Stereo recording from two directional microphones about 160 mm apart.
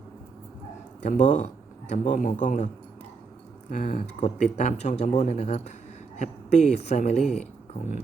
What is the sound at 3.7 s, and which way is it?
Speech, 55° left (ahead or behind).